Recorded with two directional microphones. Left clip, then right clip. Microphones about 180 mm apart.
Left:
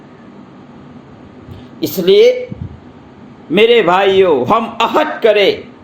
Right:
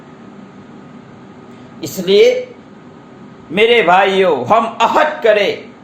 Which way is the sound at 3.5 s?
35° left (ahead or behind).